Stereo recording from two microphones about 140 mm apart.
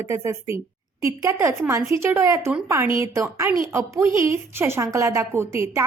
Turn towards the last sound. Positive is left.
turn(degrees=-20)  # may be behind; listen again after turning